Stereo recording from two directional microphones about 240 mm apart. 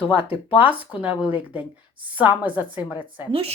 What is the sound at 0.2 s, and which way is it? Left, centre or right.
Speech, left.